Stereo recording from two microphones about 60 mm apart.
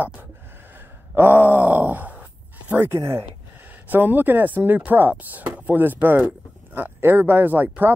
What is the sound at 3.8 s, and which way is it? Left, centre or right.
A woman's voice, right.